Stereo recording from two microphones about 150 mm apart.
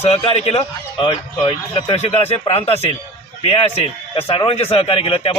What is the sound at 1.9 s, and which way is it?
A man's voice, 45° left (ahead or behind).